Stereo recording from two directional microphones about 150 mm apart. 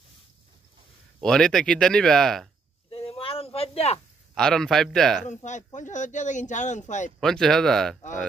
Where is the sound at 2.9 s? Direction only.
40° left (ahead or behind).